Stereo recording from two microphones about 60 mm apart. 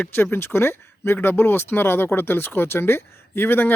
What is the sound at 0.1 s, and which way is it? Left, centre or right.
Speech, left.